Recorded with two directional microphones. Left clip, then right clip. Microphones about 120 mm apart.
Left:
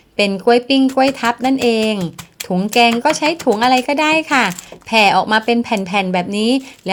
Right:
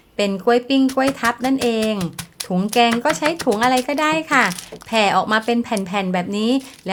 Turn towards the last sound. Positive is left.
turn(degrees=25)  # may be behind; listen again after turning